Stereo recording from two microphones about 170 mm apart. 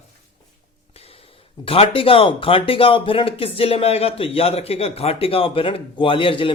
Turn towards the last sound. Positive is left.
turn(degrees=30)  # may be behind; listen again after turning